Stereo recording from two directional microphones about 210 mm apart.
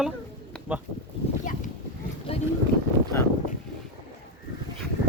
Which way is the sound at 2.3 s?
30° left (ahead or behind).